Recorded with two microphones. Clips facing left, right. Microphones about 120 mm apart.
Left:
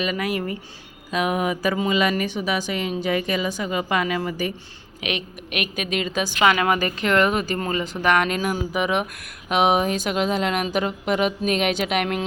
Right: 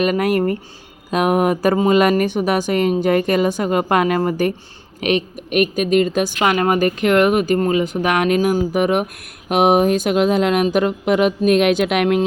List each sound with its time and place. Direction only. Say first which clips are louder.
0.0 s speech: right 8 dB; 50° right (ahead or behind)
4.9 s speech: right 10 dB; 45° right (ahead or behind)